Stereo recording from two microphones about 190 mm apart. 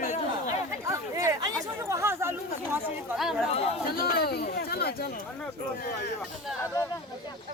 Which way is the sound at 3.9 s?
55° left (ahead or behind).